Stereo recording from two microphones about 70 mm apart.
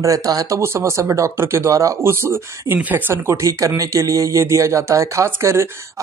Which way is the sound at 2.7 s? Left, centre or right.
Right.